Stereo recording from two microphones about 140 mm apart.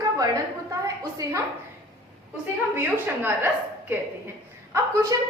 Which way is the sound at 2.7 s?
15° right (ahead or behind).